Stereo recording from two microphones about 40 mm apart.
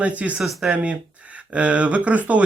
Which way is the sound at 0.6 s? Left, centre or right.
Right.